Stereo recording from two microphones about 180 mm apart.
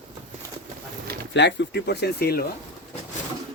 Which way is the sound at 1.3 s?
80° left.